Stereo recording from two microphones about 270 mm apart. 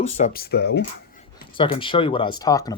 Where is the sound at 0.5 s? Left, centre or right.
Left.